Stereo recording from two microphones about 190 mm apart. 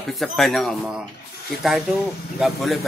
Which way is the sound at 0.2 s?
Centre (ahead or behind).